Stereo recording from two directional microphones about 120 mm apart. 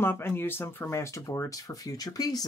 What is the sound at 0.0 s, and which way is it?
Speech, 20° left (ahead or behind).